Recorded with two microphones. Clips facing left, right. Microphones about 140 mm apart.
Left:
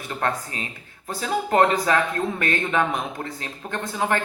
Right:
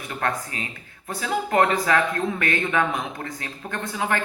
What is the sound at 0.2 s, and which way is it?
Speech, 25° left (ahead or behind).